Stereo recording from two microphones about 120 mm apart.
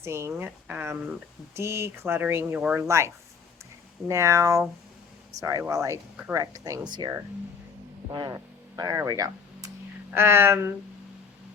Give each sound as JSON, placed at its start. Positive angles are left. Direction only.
{"t": 0.0, "sound": "speech", "side_deg": -20}
{"t": 4.1, "sound": "speech", "side_deg": -25}
{"t": 10.1, "sound": "speech", "side_deg": -20}